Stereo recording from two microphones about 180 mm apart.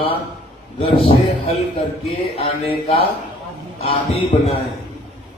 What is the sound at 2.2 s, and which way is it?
Speech, 30° left (ahead or behind).